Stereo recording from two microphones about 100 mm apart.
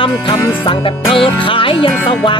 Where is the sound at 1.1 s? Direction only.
60° left (ahead or behind).